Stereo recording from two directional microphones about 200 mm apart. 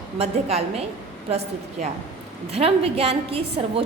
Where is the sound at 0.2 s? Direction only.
30° right (ahead or behind).